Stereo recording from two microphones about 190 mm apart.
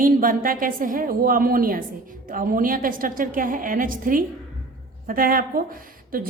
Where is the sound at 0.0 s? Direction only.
45° right (ahead or behind).